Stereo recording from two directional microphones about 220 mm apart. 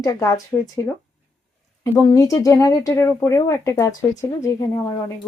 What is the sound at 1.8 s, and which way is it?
Speech, 15° left (ahead or behind).